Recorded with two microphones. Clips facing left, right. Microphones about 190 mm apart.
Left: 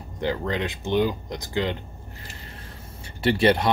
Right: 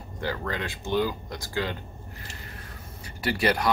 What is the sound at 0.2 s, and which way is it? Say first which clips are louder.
Speech: left 5 dB; 20° left (ahead or behind).